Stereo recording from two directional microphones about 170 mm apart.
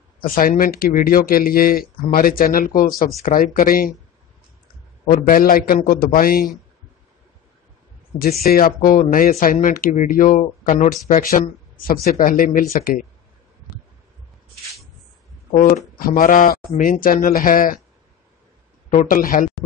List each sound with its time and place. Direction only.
0.2 s speech: 55° left (ahead or behind)
5.0 s speech: 55° left (ahead or behind)
8.2 s speech: 60° left (ahead or behind)
15.5 s speech: 60° left (ahead or behind)
18.9 s speech: 50° left (ahead or behind)